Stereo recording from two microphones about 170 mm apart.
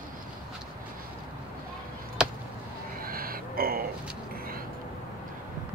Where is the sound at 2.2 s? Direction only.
5° right (ahead or behind).